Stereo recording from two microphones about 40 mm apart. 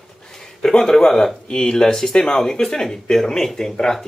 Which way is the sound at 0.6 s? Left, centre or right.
Centre.